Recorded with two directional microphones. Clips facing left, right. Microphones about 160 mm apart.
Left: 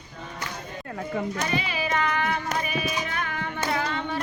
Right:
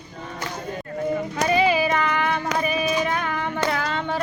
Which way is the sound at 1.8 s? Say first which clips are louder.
Right 4 dB; 90° right.